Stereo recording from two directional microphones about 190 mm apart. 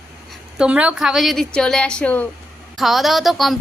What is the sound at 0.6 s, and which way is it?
A woman's voice, 5° right (ahead or behind).